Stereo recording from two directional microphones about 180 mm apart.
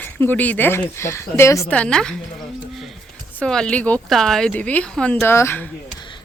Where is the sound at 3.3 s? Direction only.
5° left (ahead or behind).